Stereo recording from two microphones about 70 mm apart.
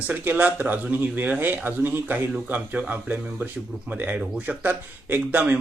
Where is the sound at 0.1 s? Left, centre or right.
Right.